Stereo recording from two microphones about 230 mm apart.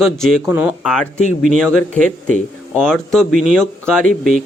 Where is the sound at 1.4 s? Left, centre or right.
Right.